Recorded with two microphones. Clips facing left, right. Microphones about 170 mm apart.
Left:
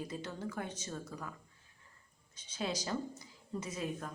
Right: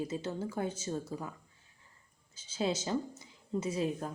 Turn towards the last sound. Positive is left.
turn(degrees=-30)  # may be behind; listen again after turning